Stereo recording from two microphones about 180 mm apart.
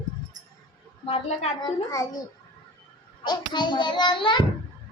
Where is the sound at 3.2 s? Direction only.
25° left (ahead or behind).